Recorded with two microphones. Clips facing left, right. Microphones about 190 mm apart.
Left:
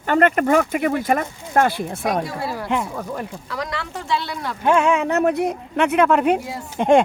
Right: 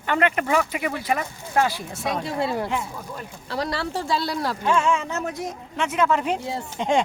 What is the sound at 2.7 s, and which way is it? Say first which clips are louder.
Speech: left 5 dB; 60° left (ahead or behind).